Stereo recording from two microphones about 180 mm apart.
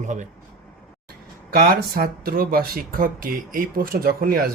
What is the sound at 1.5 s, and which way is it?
Speech, 60° right (ahead or behind).